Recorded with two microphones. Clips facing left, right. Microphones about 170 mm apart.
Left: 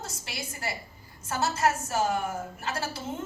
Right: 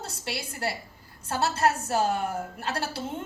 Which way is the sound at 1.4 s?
65° right (ahead or behind).